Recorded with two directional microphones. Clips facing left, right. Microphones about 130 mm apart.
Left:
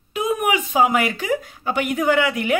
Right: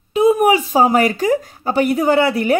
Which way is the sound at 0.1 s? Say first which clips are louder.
Right 8 dB; 30° right (ahead or behind).